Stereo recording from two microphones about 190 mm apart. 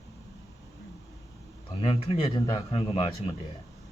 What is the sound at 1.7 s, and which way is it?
Speech, 30° left (ahead or behind).